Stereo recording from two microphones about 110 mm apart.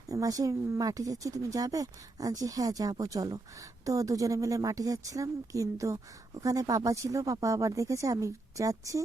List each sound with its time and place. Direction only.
0.1 s a woman's voice: 30° right (ahead or behind)